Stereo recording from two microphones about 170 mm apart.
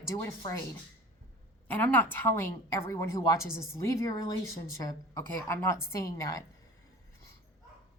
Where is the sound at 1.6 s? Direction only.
10° left (ahead or behind).